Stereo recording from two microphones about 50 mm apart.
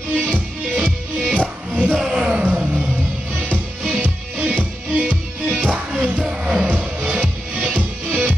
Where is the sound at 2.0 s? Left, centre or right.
Right.